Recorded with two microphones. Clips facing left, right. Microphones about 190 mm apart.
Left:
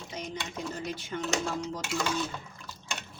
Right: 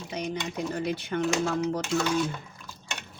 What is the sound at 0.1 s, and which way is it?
Speech, 65° right (ahead or behind).